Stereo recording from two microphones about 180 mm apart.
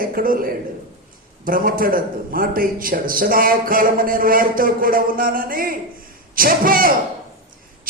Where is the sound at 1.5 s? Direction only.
50° right (ahead or behind).